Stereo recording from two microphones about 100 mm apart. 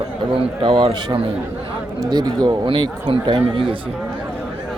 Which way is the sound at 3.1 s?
60° right (ahead or behind).